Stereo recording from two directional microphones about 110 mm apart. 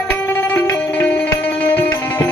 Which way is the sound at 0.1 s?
20° left (ahead or behind).